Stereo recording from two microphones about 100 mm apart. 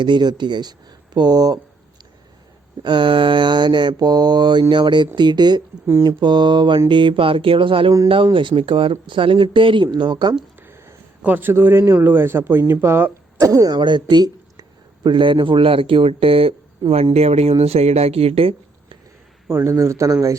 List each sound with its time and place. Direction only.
0.0 s mantra: 50° right (ahead or behind)
2.8 s mantra: 50° right (ahead or behind)
6.1 s speech: 45° right (ahead or behind)
10.6 s a man's voice: 20° right (ahead or behind)
13.4 s speech: 35° right (ahead or behind); by 16.6 s 70° right (ahead or behind)
16.8 s mantra: 45° right (ahead or behind)
17.2 s speech: 90° right; by 18.9 s 70° right (ahead or behind)
19.5 s a man's voice: 25° right (ahead or behind)